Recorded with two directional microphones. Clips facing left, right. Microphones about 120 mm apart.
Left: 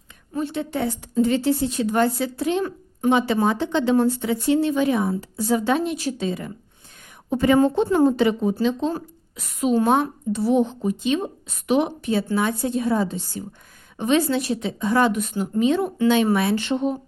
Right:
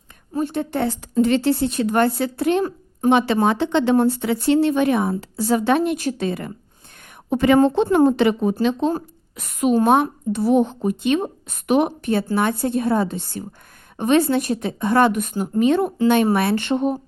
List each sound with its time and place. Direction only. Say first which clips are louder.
0.3 s a woman's voice: right 3 dB; 50° right (ahead or behind)
7.3 s a woman's voice: right 2 dB; 80° right
7.9 s speech: right 2 dB; 60° right (ahead or behind)
8.9 s a woman's voice: right 4 dB; 50° right (ahead or behind)